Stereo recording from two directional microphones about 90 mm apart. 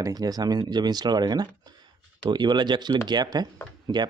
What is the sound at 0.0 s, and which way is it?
Speech, 45° right (ahead or behind).